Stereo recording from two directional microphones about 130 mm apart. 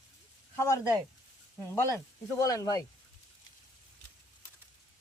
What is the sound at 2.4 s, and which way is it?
Speech, 25° left (ahead or behind).